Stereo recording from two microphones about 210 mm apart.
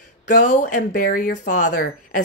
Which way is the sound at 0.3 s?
35° left (ahead or behind).